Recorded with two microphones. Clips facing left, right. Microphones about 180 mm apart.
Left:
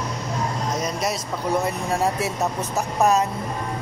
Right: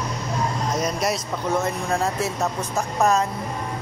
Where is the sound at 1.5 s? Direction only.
10° left (ahead or behind).